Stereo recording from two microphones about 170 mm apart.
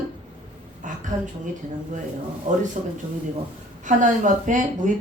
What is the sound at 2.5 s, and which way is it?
Speech, 50° right (ahead or behind).